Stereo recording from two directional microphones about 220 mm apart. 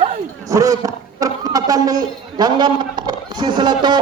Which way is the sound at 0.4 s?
15° right (ahead or behind).